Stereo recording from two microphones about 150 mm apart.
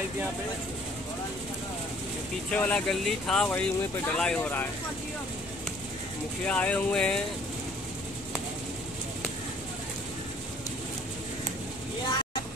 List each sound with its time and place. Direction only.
2.5 s speech: 10° left (ahead or behind)
6.4 s speech: 10° left (ahead or behind)